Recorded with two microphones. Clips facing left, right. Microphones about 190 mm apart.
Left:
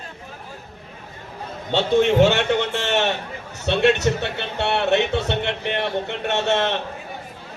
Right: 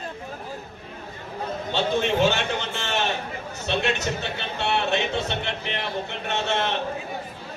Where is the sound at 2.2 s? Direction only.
75° left (ahead or behind).